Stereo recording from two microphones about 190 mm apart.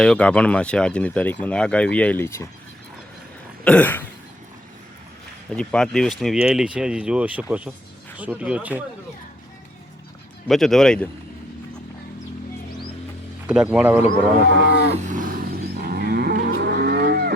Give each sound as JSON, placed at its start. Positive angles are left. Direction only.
{"t": 0.0, "sound": "speech", "side_deg": 5}
{"t": 3.6, "sound": "cough", "side_deg": 5}
{"t": 5.5, "sound": "speech", "side_deg": 5}
{"t": 10.5, "sound": "speech", "side_deg": 0}
{"t": 13.5, "sound": "speech", "side_deg": -5}
{"t": 14.8, "sound": "roaring cats", "side_deg": -40}
{"t": 15.9, "sound": "livestock", "side_deg": -55}
{"t": 16.5, "sound": "cattle", "side_deg": -60}